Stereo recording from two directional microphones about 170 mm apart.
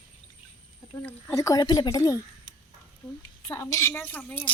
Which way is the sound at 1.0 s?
10° left (ahead or behind).